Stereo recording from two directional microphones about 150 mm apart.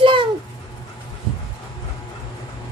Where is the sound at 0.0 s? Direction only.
35° right (ahead or behind).